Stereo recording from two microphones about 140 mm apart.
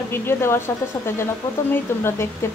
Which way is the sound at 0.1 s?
15° left (ahead or behind).